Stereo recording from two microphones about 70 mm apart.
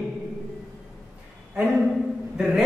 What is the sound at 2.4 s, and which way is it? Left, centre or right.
Speech, centre.